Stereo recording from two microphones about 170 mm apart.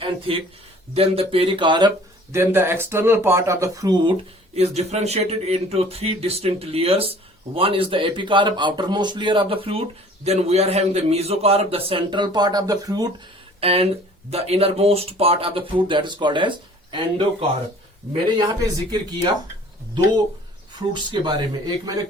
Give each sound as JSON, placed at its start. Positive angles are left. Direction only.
{"t": 0.0, "sound": "a sound", "side_deg": -30}
{"t": 0.9, "sound": "speech", "side_deg": -35}
{"t": 2.3, "sound": "speech", "side_deg": -15}
{"t": 4.5, "sound": "speech", "side_deg": -40}
{"t": 13.6, "sound": "speech", "side_deg": -35}
{"t": 20.7, "sound": "speech", "side_deg": -25}